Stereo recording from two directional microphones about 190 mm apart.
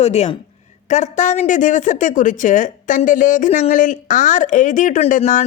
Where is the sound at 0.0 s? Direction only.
35° left (ahead or behind).